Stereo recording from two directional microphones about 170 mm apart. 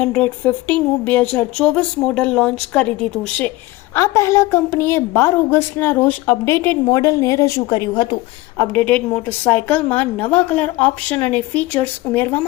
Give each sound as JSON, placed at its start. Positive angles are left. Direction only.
{"t": 0.0, "sound": "a woman's voice", "side_deg": 10}
{"t": 3.9, "sound": "a woman's voice", "side_deg": 20}
{"t": 8.5, "sound": "a woman's voice", "side_deg": 10}